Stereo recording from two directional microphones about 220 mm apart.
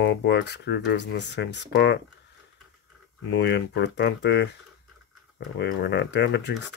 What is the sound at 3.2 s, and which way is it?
Speech, 50° left (ahead or behind).